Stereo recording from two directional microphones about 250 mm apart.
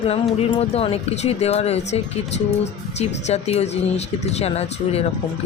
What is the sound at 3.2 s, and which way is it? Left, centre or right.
A woman's voice, left.